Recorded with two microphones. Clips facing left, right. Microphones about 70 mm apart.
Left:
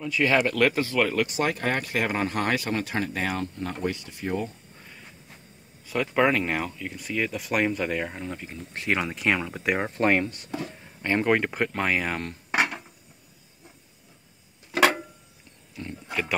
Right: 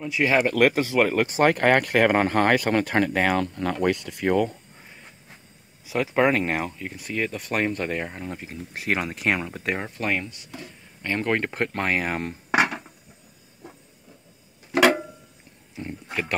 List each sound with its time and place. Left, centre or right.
0.0 s speech: centre
1.1 s speech: right
1.4 s speech: right
2.0 s speech: right
5.9 s speech: centre
9.8 s speech: left
11.0 s speech: centre
11.3 s speech: centre
12.5 s a sound: right
15.7 s a sound: right
16.1 s a sound: centre